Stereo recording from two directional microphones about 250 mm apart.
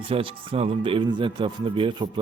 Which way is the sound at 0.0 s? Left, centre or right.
Right.